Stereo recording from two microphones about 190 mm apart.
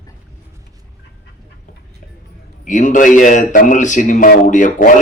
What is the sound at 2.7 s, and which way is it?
A man's voice, 40° left (ahead or behind).